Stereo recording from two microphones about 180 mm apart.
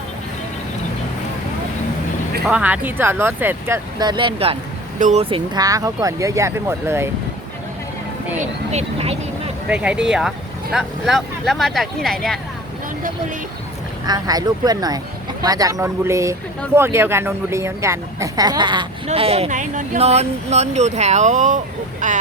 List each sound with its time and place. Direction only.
2.5 s speech: 5° right (ahead or behind)
3.9 s speech: 25° right (ahead or behind)
4.9 s speech: 45° right (ahead or behind)
5.2 s speech: 25° right (ahead or behind)
8.4 s speech: 35° right (ahead or behind)
9.6 s speech: 5° right (ahead or behind)
14.1 s speech: 20° right (ahead or behind); by 22.2 s 45° right (ahead or behind)